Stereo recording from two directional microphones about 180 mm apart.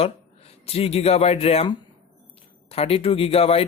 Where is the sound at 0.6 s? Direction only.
35° left (ahead or behind).